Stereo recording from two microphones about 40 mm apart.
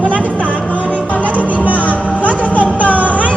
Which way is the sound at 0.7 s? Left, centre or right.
Left.